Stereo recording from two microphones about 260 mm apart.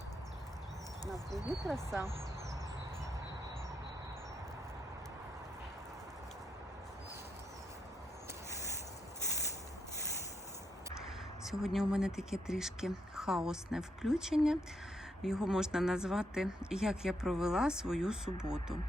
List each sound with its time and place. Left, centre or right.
1.5 s a woman's voice: centre
10.9 s a woman's voice: centre
18.3 s speech: left